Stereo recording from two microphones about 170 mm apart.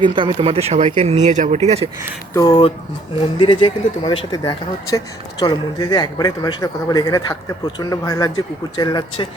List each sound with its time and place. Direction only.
0.0 s speech: 30° right (ahead or behind)
2.3 s speech: 25° left (ahead or behind)